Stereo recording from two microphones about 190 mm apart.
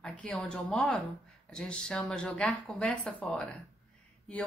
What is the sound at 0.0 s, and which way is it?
A woman's voice, 5° left (ahead or behind).